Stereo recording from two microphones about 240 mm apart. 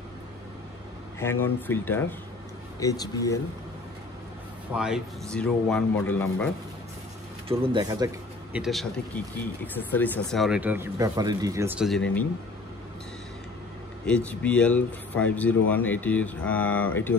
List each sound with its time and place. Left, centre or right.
1.2 s speech: centre
4.7 s speech: centre
7.4 s speech: right
8.5 s speech: centre
14.0 s speech: centre